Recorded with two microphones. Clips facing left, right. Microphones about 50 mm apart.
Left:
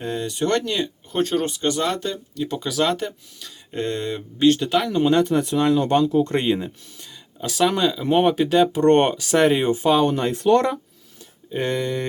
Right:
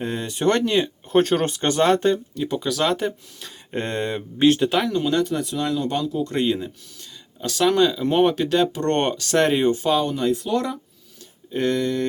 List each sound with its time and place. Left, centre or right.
0.0 s speech: centre
1.1 s speech: right
2.3 s speech: centre
3.4 s speech: right
4.5 s speech: centre
5.0 s speech: left
6.4 s speech: centre
7.4 s speech: centre
9.7 s speech: centre
10.1 s speech: left
10.4 s speech: left
11.5 s speech: centre